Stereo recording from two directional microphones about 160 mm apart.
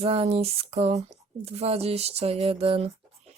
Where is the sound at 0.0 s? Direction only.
40° right (ahead or behind).